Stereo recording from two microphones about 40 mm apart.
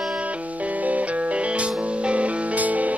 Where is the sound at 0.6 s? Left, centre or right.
Right.